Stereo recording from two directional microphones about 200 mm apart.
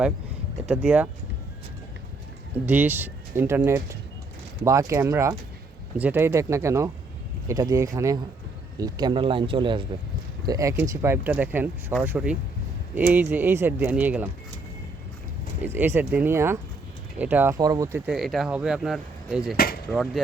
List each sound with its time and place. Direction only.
0.7 s speech: 5° right (ahead or behind)
2.6 s speech: 10° right (ahead or behind)
15.6 s speech: 10° right (ahead or behind)
19.5 s speech: 50° left (ahead or behind)
19.9 s speech: centre (ahead or behind)